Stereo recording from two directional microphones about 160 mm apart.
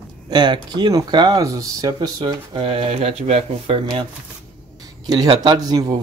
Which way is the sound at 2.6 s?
35° right (ahead or behind).